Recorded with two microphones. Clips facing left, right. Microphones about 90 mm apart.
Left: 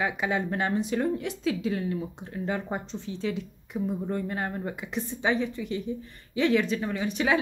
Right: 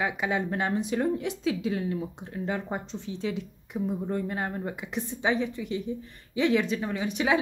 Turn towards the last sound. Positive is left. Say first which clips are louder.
# even
turn(degrees=-15)  # may be behind; listen again after turning